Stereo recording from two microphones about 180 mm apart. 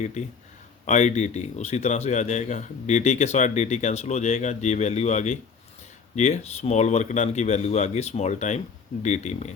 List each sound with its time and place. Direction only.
0.0 s a man's voice: 40° left (ahead or behind)